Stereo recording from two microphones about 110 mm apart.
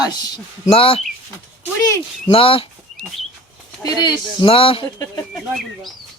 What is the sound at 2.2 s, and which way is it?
Speech, 55° left (ahead or behind).